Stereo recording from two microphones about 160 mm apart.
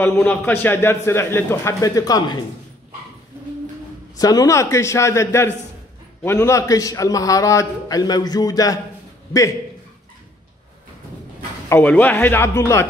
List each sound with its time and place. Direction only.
0.0 s a man's voice: 15° left (ahead or behind)
4.2 s a man's voice: 20° left (ahead or behind)
11.7 s a man's voice: 10° left (ahead or behind)